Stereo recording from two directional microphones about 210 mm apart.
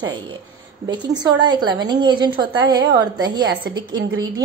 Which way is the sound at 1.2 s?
20° right (ahead or behind).